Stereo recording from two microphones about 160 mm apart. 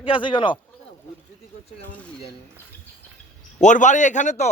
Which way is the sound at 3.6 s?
50° left (ahead or behind).